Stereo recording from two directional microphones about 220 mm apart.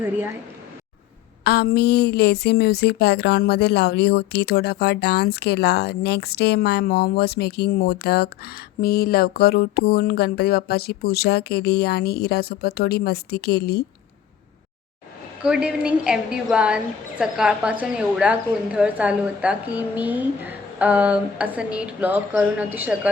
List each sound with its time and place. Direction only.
1.5 s a woman's voice: 45° left (ahead or behind)
15.4 s a woman's voice: 5° right (ahead or behind)